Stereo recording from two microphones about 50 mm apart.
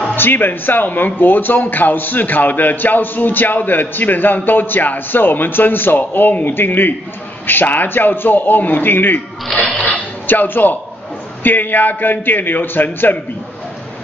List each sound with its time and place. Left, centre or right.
0.1 s speech: left
9.6 s a sound: left
10.2 s speech: left